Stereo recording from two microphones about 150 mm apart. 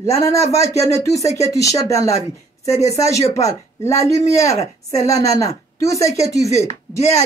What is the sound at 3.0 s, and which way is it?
Speech, 20° left (ahead or behind).